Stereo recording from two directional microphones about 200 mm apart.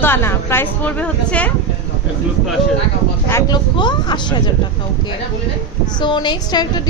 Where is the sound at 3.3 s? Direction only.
10° left (ahead or behind).